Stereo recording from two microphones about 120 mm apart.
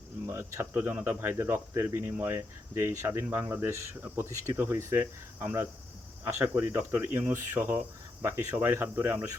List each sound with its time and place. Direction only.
0.3 s speech: 20° right (ahead or behind)